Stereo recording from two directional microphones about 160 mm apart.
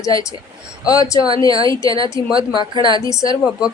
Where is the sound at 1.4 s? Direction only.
25° left (ahead or behind).